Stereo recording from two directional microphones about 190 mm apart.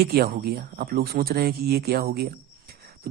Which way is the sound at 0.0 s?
55° right (ahead or behind).